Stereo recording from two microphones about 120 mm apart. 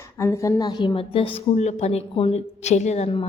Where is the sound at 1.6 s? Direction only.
65° left (ahead or behind).